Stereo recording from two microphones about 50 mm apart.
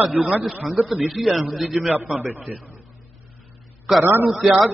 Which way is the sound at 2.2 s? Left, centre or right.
Right.